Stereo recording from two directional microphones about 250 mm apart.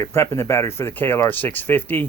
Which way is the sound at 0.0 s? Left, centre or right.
Centre.